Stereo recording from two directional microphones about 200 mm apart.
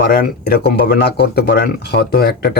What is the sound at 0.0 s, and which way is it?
Speech, 50° left (ahead or behind).